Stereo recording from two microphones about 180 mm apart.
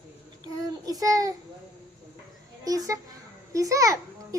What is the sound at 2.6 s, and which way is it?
A child's voice, 20° right (ahead or behind).